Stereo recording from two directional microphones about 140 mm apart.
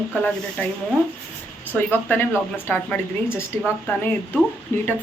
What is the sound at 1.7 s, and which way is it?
A woman's voice, 15° left (ahead or behind).